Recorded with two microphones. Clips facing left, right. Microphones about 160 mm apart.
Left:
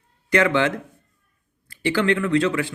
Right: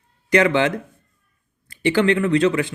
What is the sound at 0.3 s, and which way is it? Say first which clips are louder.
Speech: right 2 dB; 20° right (ahead or behind).